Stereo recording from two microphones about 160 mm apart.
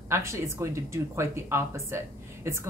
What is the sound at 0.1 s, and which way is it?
Speech, 15° right (ahead or behind).